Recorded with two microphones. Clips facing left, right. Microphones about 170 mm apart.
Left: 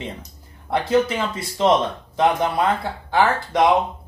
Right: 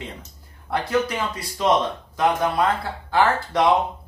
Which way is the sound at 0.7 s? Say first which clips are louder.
Left 4 dB; 25° left (ahead or behind).